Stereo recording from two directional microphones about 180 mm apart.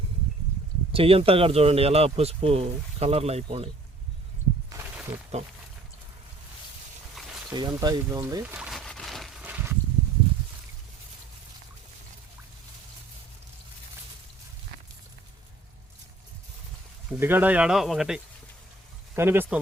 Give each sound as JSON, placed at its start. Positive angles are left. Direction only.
{"t": 0.9, "sound": "speech", "side_deg": -30}
{"t": 5.3, "sound": "speech", "side_deg": -35}
{"t": 7.5, "sound": "speech", "side_deg": -20}
{"t": 8.5, "sound": "a sound", "side_deg": 0}
{"t": 17.1, "sound": "speech", "side_deg": -10}
{"t": 19.1, "sound": "speech", "side_deg": -15}